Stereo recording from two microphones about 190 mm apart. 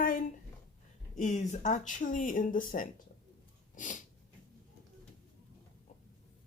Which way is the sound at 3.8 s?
40° left (ahead or behind).